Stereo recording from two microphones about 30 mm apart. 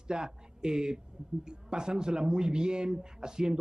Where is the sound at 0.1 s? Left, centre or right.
Right.